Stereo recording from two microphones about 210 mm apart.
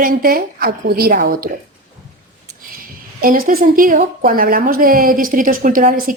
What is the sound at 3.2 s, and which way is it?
Speech, 40° right (ahead or behind).